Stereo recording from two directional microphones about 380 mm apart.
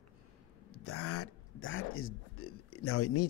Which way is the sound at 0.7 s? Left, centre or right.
Left.